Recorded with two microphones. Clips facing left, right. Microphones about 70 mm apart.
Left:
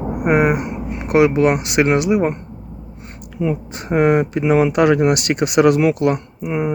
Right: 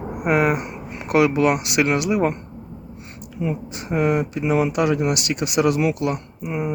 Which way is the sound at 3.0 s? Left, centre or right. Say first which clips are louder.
Left 2 dB; left.